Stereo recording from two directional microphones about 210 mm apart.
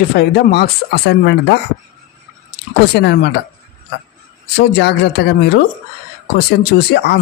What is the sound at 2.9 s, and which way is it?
Speech, 50° left (ahead or behind).